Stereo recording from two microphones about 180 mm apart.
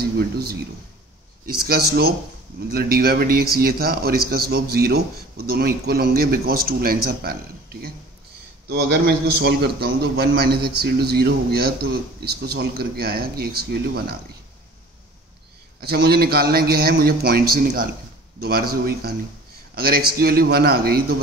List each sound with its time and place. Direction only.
0.0 s a man's voice: 60° right (ahead or behind)
15.8 s a man's voice: 60° right (ahead or behind)